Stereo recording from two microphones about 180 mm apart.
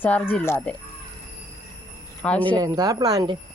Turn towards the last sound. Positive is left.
turn(degrees=-25)  # may be behind; listen again after turning